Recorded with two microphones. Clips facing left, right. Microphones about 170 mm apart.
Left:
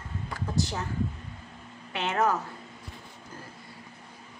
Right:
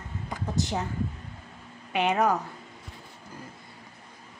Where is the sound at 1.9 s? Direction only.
15° right (ahead or behind).